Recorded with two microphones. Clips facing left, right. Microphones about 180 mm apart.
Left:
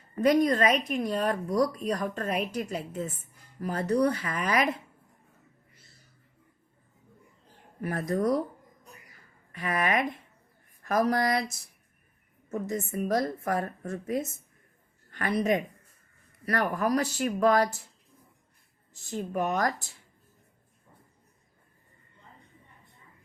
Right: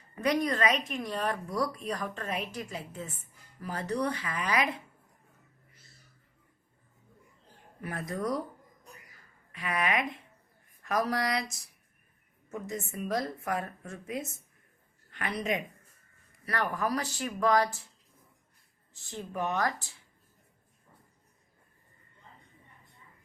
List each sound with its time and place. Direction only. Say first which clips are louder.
0.3 s speech: left 5 dB; 40° left (ahead or behind)
7.8 s a woman's voice: left 6 dB; 35° left (ahead or behind)
9.5 s a woman's voice: left 3 dB; 40° left (ahead or behind)
19.0 s a woman's voice: left 4 dB; 40° left (ahead or behind)